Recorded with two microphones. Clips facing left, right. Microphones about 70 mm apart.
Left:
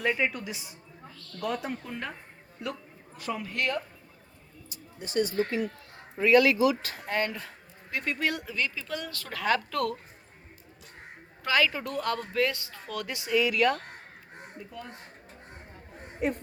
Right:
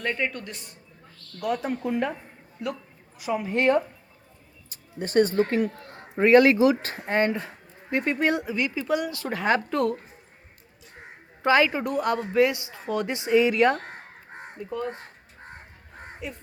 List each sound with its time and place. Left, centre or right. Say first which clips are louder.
0.0 s a man's voice: even; centre
3.2 s a man's voice: right 6 dB; centre
4.7 s speech: right 8 dB; right
6.1 s a man's voice: right 5 dB; right
11.4 s a man's voice: right 6 dB; right
16.2 s crow: left 8 dB; left